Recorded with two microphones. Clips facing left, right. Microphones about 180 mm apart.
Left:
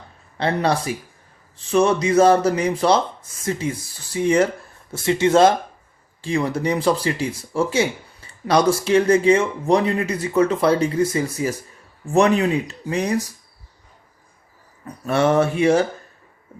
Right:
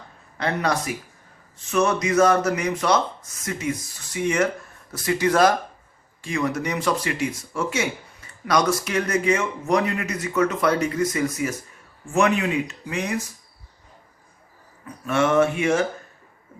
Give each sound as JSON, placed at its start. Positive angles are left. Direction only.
{"t": 0.3, "sound": "speech", "side_deg": 30}
{"t": 15.0, "sound": "speech", "side_deg": 35}